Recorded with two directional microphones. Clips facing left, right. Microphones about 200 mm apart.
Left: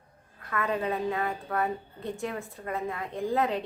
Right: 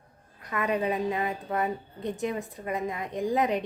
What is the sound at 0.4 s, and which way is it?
A woman's voice, 15° right (ahead or behind).